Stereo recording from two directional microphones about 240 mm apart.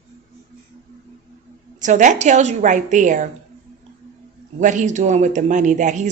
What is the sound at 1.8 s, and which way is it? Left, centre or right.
Speech, right.